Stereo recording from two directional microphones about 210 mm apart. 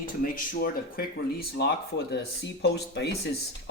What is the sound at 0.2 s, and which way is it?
Speech, 40° left (ahead or behind).